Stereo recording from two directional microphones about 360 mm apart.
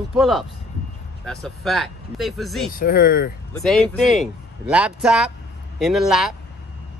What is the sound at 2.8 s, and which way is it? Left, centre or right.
Speech, left.